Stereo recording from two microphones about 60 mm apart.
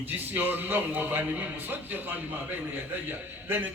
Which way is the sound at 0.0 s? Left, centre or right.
Right.